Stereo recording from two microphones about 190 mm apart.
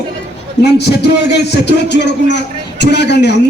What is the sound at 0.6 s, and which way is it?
A man's voice, 60° left (ahead or behind).